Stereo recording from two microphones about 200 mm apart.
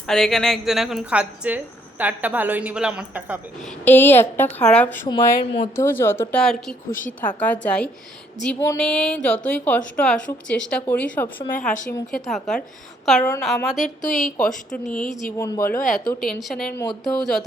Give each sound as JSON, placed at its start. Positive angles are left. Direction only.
{"t": 0.1, "sound": "a woman's voice", "side_deg": 0}
{"t": 3.8, "sound": "a woman's voice", "side_deg": 10}
{"t": 5.0, "sound": "a woman's voice", "side_deg": 25}
{"t": 5.7, "sound": "a woman's voice", "side_deg": 10}
{"t": 11.5, "sound": "speech", "side_deg": 40}
{"t": 11.9, "sound": "a woman's voice", "side_deg": 15}
{"t": 12.3, "sound": "a woman's voice", "side_deg": 5}
{"t": 13.7, "sound": "speech", "side_deg": 40}
{"t": 14.2, "sound": "a woman's voice", "side_deg": 5}
{"t": 14.8, "sound": "speech", "side_deg": 40}
{"t": 15.4, "sound": "a woman's voice", "side_deg": 15}
{"t": 15.6, "sound": "speech", "side_deg": 45}
{"t": 16.2, "sound": "a woman's voice", "side_deg": 0}